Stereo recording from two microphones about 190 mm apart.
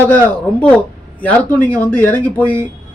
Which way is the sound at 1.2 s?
10° left (ahead or behind).